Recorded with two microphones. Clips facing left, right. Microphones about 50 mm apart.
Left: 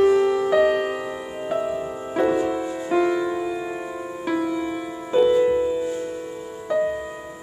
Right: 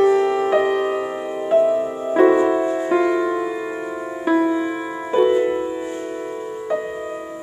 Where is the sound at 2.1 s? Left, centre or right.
Right.